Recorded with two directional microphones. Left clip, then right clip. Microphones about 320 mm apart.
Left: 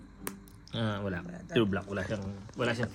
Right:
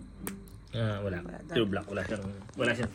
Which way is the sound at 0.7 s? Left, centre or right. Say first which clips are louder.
Even; left.